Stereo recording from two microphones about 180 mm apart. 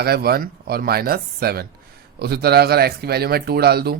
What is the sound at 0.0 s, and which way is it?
Speech, 60° right (ahead or behind).